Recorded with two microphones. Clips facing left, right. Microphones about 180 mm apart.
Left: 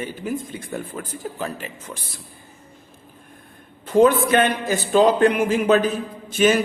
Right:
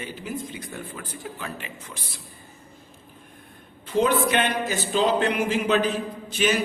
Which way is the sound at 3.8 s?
50° left (ahead or behind).